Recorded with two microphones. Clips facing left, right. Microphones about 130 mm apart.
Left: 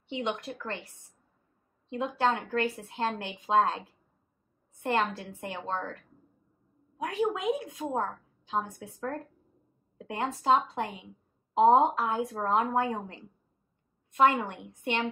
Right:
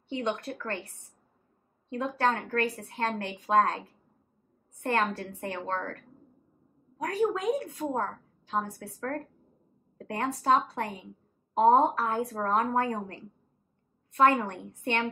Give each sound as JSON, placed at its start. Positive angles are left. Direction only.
{"t": 0.1, "sound": "a woman's voice", "side_deg": 15}
{"t": 1.9, "sound": "a woman's voice", "side_deg": 15}